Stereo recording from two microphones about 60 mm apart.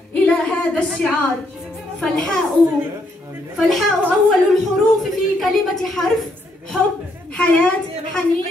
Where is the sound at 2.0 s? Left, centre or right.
Centre.